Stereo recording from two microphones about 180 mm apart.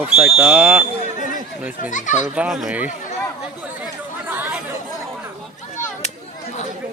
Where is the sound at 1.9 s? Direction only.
45° left (ahead or behind).